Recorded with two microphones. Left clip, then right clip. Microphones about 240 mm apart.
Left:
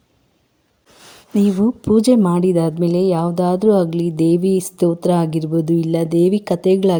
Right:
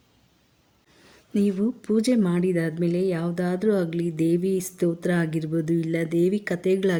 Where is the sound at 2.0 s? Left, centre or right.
Centre.